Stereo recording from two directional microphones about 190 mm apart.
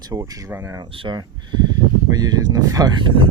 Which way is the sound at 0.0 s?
20° right (ahead or behind).